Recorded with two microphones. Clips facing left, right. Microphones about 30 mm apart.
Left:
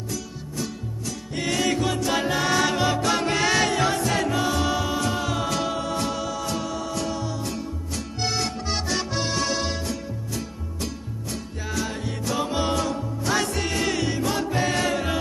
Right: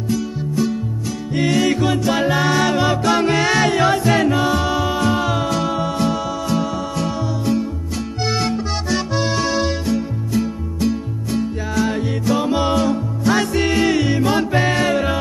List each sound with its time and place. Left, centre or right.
0.1 s music: centre
3.7 s music: right
5.5 s music: centre
8.8 s music: centre; by 14.7 s right
14.7 s music: centre